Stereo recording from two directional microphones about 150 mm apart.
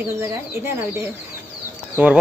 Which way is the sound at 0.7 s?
15° right (ahead or behind).